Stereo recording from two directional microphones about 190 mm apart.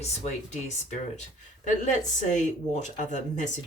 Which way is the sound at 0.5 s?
40° left (ahead or behind).